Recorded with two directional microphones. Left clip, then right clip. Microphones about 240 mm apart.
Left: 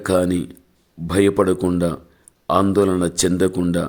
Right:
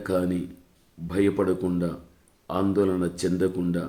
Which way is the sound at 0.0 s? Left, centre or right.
Left.